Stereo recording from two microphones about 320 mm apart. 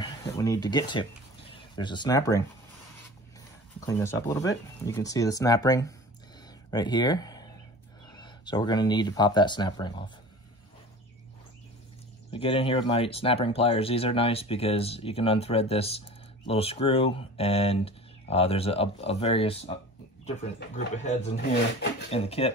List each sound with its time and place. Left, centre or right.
0.0 s speech: centre
3.8 s speech: centre
12.3 s speech: centre